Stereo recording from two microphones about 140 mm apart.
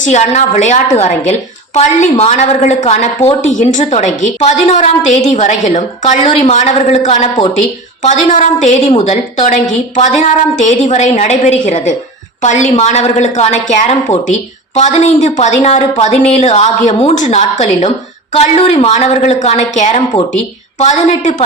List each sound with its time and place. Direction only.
0.0 s a woman's voice: 60° left (ahead or behind)